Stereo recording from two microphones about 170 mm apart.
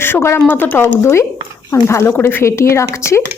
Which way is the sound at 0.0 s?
15° left (ahead or behind).